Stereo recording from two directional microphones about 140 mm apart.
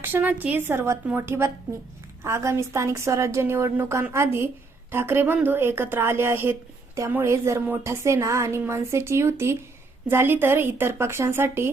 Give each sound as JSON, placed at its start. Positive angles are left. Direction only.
{"t": 0.0, "sound": "a woman's voice", "side_deg": -15}